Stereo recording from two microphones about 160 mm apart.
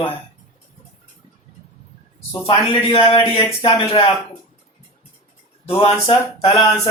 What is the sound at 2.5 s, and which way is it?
Speech, 30° left (ahead or behind).